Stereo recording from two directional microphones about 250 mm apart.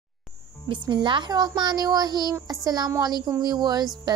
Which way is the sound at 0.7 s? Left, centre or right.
Centre.